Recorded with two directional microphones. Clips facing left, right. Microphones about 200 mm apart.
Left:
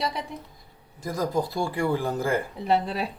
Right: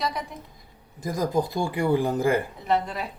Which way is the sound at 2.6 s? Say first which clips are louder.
Left 1 dB; 30° left (ahead or behind).